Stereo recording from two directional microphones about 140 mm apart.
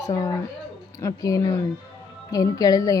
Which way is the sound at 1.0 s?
25° left (ahead or behind).